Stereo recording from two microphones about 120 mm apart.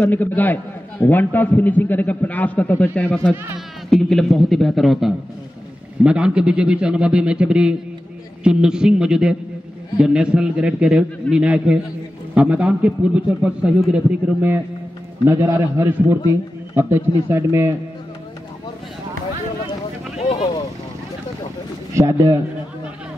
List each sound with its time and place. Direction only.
0.0 s a man's voice: 15° left (ahead or behind); by 17.7 s 20° right (ahead or behind)
21.9 s a man's voice: 20° right (ahead or behind)